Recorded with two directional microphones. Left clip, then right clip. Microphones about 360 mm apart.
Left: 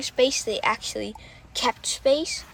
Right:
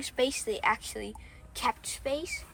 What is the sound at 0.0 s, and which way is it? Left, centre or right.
Speech, centre.